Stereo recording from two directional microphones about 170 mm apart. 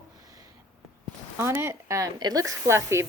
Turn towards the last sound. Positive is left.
turn(degrees=-15)  # may be behind; listen again after turning